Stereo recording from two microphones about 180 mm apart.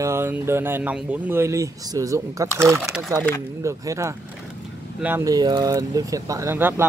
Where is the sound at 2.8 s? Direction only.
Centre (ahead or behind).